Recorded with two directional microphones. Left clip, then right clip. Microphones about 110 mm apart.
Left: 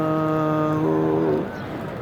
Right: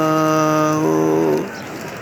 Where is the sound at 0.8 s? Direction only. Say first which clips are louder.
Right 5 dB; 60° right (ahead or behind).